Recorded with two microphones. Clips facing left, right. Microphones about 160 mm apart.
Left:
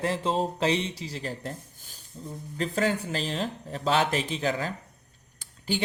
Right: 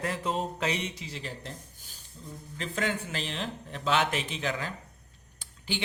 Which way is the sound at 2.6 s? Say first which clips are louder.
Left 5 dB; 35° left (ahead or behind).